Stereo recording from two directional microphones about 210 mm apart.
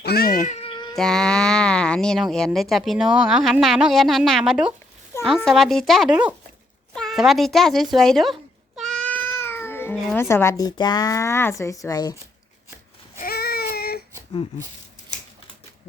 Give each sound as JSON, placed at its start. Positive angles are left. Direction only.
{"t": 0.0, "sound": "cat", "side_deg": 50}
{"t": 0.3, "sound": "cat", "side_deg": 35}
{"t": 0.9, "sound": "speech", "side_deg": 5}
{"t": 13.1, "sound": "baby cry", "side_deg": 45}